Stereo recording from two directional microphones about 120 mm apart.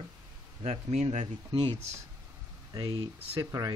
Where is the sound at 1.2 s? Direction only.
40° right (ahead or behind).